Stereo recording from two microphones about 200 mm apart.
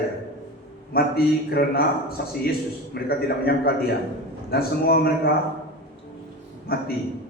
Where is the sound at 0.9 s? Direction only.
50° left (ahead or behind).